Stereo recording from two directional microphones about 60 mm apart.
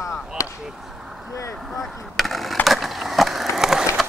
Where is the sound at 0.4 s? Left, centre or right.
Left.